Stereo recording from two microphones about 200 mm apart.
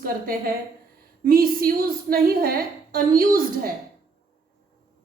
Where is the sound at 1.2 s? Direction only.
45° right (ahead or behind).